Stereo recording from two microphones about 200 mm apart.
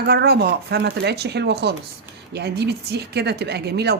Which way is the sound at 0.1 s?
55° right (ahead or behind).